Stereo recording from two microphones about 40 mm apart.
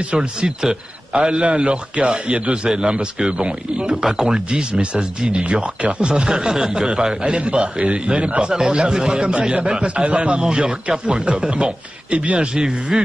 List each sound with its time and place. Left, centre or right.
0.0 s a man's voice: right
3.9 s a man's voice: centre